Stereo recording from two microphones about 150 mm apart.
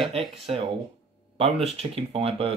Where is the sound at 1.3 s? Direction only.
40° right (ahead or behind).